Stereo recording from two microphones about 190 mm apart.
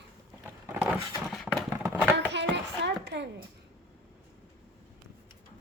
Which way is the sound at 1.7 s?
10° right (ahead or behind).